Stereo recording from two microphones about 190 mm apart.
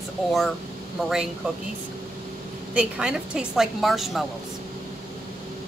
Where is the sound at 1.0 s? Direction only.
5° right (ahead or behind).